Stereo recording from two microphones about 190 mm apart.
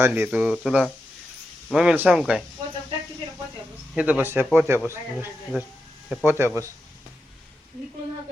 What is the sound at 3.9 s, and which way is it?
Speech, 10° right (ahead or behind).